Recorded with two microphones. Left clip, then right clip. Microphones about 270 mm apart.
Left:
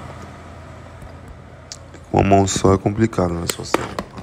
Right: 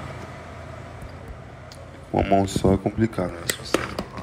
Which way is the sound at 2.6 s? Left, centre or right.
Right.